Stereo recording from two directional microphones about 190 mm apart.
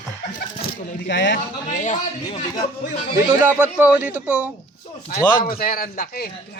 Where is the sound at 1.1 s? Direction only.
65° left (ahead or behind).